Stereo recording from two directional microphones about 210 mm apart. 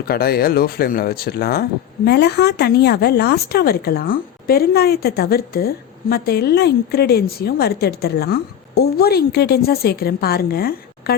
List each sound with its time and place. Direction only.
0.1 s speech: 45° left (ahead or behind)